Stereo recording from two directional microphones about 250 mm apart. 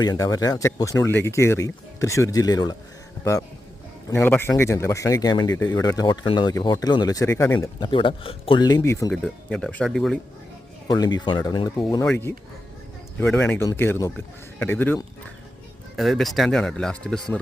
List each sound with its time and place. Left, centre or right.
0.0 s speech: centre
4.1 s speech: centre
10.8 s speech: centre